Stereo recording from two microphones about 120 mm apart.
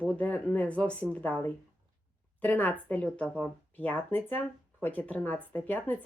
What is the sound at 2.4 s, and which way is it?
A woman's voice, 15° left (ahead or behind).